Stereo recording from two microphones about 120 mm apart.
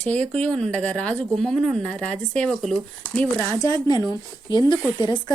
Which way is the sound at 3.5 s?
30° left (ahead or behind).